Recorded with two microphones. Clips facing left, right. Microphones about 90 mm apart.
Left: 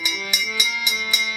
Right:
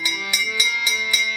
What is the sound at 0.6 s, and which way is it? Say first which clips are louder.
Music: right 2 dB; 15° left (ahead or behind).